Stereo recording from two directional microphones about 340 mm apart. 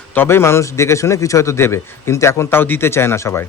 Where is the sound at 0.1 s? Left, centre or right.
Centre.